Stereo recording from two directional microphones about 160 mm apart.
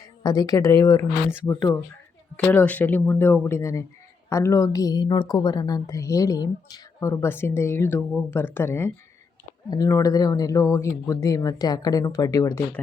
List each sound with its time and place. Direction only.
0.2 s a woman's voice: 25° left (ahead or behind)